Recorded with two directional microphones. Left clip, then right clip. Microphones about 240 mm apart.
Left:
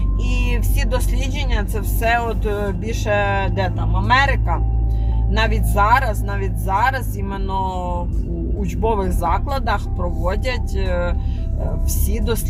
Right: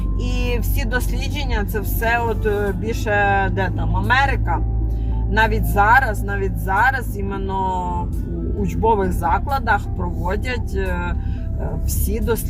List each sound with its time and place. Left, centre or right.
0.3 s speech: left